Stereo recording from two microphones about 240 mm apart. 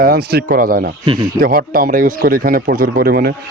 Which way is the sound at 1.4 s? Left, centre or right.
Right.